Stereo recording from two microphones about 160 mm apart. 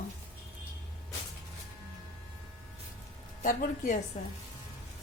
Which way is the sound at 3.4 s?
60° left (ahead or behind).